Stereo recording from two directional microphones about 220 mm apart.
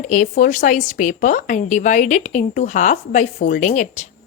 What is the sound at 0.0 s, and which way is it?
A woman's voice, 35° left (ahead or behind).